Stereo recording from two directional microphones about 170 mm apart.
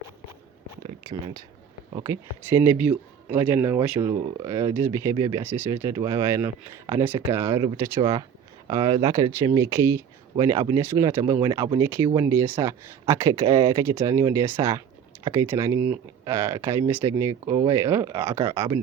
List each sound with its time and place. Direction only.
1.0 s speech: 25° right (ahead or behind)